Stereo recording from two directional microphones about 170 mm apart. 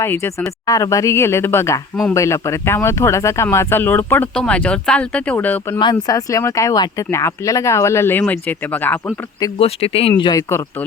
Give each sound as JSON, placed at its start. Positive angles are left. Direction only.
{"t": 0.0, "sound": "speech", "side_deg": 15}
{"t": 5.8, "sound": "speech", "side_deg": 25}
{"t": 9.6, "sound": "speech", "side_deg": 35}